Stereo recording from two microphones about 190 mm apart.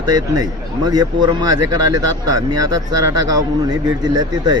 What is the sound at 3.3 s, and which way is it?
Speech, 20° right (ahead or behind).